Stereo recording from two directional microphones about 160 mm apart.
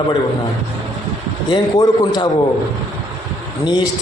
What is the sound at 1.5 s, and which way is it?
Speech, 25° left (ahead or behind).